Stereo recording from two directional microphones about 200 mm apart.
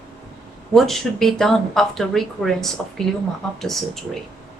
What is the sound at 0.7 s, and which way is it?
A woman's voice, centre (ahead or behind).